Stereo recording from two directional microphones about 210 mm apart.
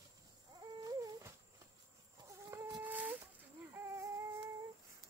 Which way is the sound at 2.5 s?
15° right (ahead or behind).